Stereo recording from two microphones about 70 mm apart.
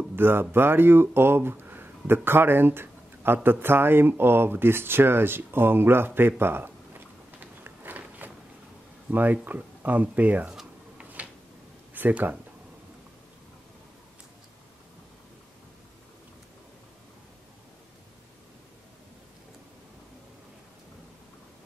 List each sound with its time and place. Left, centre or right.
0.1 s speech: right
11.0 s a sound: right
11.9 s speech: right